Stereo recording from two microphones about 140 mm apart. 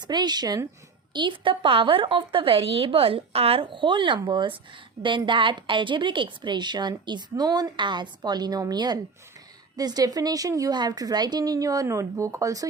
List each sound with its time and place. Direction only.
0.0 s a woman's voice: 30° right (ahead or behind)